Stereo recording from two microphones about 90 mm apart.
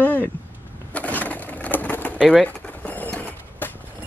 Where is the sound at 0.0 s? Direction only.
20° left (ahead or behind).